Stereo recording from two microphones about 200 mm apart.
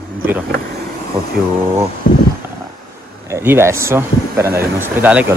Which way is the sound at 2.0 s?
45° left (ahead or behind).